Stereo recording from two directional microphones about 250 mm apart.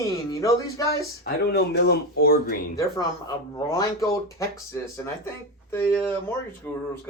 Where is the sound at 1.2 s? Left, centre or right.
Left.